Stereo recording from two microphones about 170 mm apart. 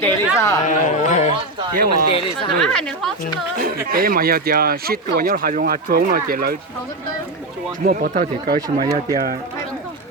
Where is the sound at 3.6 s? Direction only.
60° right (ahead or behind).